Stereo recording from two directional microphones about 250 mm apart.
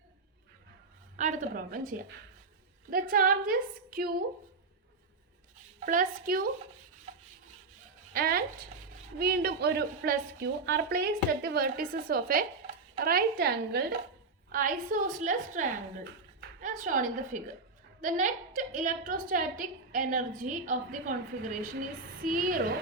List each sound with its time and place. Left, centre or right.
1.1 s a woman's voice: right
5.8 s a woman's voice: right
8.1 s a woman's voice: right